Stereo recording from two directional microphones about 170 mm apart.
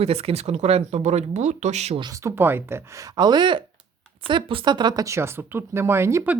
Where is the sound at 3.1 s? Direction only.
25° right (ahead or behind).